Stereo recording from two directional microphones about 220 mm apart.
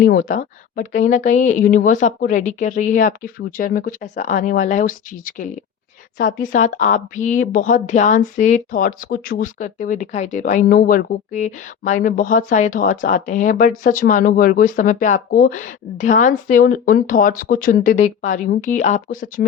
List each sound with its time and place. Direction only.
0.0 s speech: 40° left (ahead or behind)